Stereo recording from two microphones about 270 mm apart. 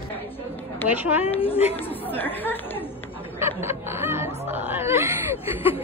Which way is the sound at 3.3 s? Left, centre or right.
Centre.